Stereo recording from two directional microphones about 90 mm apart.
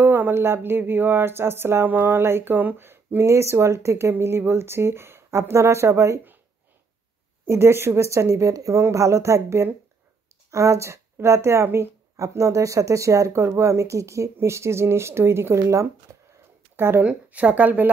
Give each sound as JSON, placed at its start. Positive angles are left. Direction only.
{"t": 0.0, "sound": "speech", "side_deg": -25}
{"t": 7.4, "sound": "speech", "side_deg": -30}
{"t": 16.1, "sound": "a sound", "side_deg": -35}
{"t": 16.7, "sound": "a woman's voice", "side_deg": -25}